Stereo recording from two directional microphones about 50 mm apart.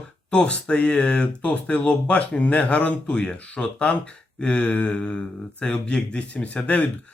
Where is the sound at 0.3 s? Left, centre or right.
Left.